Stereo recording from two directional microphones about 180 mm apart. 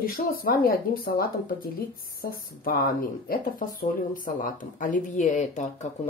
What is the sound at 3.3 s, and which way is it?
Speech, 50° left (ahead or behind).